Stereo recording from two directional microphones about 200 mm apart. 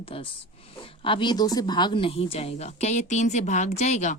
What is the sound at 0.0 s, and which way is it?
Speech, 25° left (ahead or behind).